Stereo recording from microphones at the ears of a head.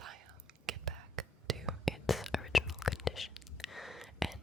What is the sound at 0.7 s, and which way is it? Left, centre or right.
Whispering, right.